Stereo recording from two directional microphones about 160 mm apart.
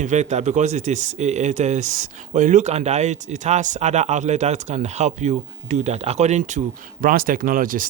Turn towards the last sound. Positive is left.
turn(degrees=-60)  # may be behind; listen again after turning